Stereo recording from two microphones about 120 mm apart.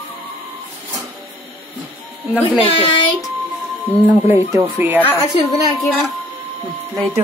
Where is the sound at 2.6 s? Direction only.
50° left (ahead or behind).